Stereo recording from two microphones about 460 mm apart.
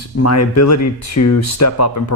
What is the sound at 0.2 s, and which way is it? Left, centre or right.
Speech, left.